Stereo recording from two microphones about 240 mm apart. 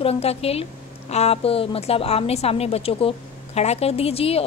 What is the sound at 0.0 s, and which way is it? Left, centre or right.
A woman's voice, left.